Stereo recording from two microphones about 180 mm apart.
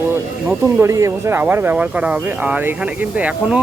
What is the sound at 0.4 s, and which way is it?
Speech, 15° right (ahead or behind).